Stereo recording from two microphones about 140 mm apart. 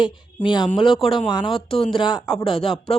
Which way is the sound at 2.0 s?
35° left (ahead or behind).